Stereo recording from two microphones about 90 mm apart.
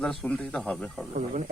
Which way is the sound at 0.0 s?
5° left (ahead or behind).